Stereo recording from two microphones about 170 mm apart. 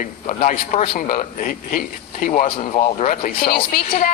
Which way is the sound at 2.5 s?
35° left (ahead or behind).